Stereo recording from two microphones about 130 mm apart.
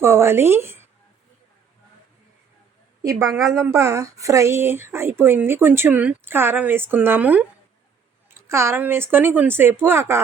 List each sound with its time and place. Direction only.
0.0 s speech: 20° right (ahead or behind)
3.0 s a woman's voice: 25° right (ahead or behind)